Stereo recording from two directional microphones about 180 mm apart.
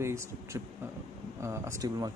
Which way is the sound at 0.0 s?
15° right (ahead or behind).